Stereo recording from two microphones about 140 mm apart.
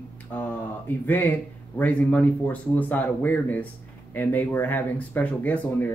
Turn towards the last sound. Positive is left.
turn(degrees=10)  # may be behind; listen again after turning